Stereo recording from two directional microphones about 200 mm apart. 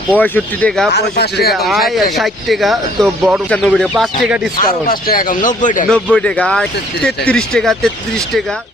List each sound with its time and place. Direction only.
0.2 s speech: 5° left (ahead or behind)
0.9 s speech: 55° left (ahead or behind)
1.5 s speech: centre (ahead or behind)
3.5 s speech: 5° left (ahead or behind)
4.9 s speech: 45° left (ahead or behind)
5.9 s speech: 5° left (ahead or behind)